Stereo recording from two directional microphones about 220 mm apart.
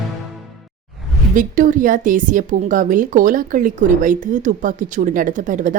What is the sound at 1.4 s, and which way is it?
Speech, 35° right (ahead or behind).